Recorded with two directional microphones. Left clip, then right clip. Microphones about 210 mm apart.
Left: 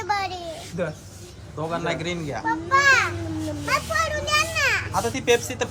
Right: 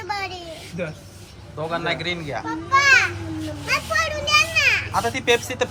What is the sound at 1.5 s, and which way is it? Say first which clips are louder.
A child's voice: right 2 dB; 10° left (ahead or behind).